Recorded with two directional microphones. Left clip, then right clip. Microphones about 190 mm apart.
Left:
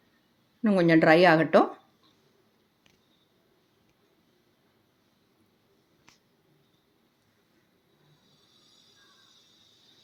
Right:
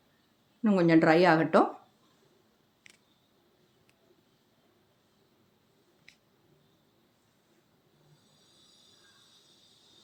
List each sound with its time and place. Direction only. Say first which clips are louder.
0.6 s a woman's voice: left 2 dB; 5° left (ahead or behind)